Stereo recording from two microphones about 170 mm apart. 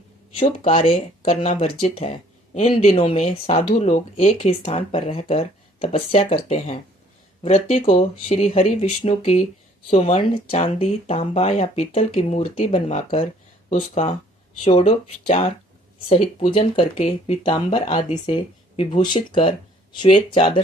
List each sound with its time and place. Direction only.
0.3 s speech: 35° left (ahead or behind)